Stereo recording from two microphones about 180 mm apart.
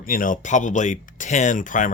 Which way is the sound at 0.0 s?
50° left (ahead or behind).